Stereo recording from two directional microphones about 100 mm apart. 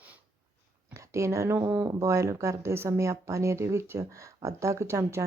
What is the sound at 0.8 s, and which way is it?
Speech, 30° right (ahead or behind).